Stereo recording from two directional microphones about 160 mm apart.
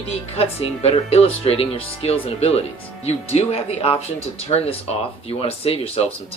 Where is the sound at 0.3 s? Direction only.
40° left (ahead or behind).